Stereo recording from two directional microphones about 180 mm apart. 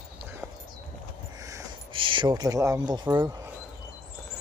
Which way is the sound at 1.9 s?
30° right (ahead or behind).